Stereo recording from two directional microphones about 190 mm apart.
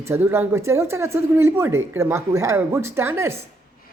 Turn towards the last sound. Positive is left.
turn(degrees=-15)  # may be behind; listen again after turning